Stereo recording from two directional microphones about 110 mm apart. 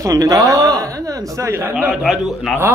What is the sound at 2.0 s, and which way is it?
Speech, centre (ahead or behind).